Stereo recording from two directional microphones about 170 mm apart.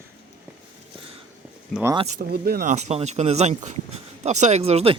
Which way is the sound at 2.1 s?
60° right (ahead or behind).